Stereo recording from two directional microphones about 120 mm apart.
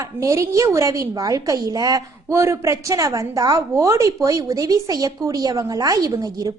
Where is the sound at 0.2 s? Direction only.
25° right (ahead or behind).